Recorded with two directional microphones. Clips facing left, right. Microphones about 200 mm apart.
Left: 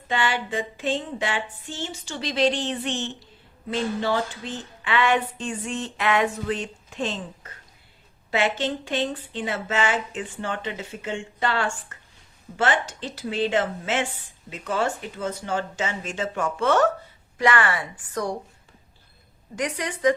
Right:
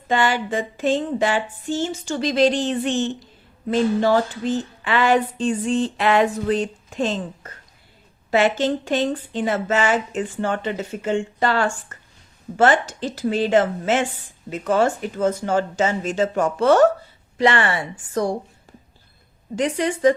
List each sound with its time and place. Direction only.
0.1 s a woman's voice: 45° right (ahead or behind)
19.5 s a woman's voice: 30° right (ahead or behind)